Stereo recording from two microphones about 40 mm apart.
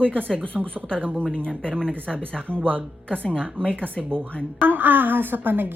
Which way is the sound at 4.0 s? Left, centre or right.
Centre.